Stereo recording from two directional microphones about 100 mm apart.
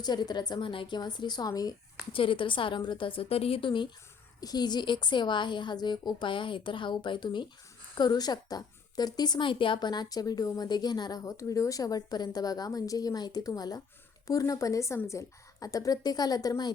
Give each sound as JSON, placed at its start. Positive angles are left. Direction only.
{"t": 0.0, "sound": "a woman's voice", "side_deg": 45}
{"t": 2.1, "sound": "a woman's voice", "side_deg": 60}
{"t": 4.4, "sound": "a woman's voice", "side_deg": 40}